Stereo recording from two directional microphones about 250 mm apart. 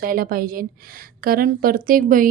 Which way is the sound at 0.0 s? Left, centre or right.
Right.